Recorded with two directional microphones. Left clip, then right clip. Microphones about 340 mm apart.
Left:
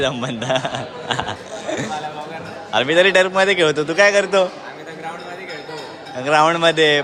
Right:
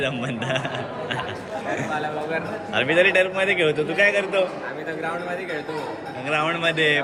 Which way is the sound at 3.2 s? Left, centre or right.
Left.